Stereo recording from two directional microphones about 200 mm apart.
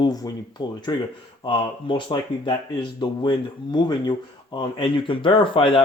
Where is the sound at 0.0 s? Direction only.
20° left (ahead or behind).